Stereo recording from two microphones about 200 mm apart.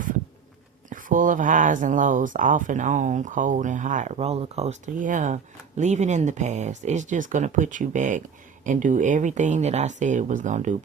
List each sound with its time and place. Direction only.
0.9 s speech: 40° right (ahead or behind)